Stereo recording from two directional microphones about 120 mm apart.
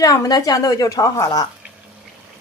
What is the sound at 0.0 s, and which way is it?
A woman's voice, 30° left (ahead or behind).